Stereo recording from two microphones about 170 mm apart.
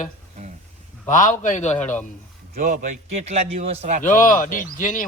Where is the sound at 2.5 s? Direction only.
50° right (ahead or behind).